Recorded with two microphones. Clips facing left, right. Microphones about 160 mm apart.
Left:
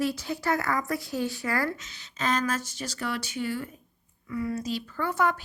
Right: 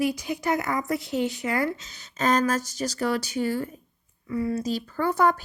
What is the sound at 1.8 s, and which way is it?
Speech, 40° right (ahead or behind).